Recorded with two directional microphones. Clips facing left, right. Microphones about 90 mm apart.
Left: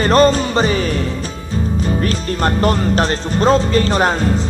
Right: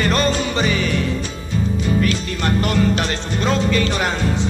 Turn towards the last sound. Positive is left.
turn(degrees=40)  # may be behind; listen again after turning